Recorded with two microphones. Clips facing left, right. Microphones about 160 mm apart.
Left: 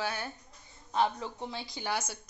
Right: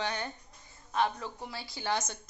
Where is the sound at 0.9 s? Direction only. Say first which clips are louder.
Left 1 dB; 25° left (ahead or behind); by 2.1 s 10° left (ahead or behind).